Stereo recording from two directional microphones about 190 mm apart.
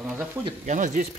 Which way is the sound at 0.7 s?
40° right (ahead or behind).